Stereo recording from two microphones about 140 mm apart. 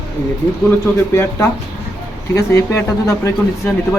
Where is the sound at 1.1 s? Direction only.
20° left (ahead or behind).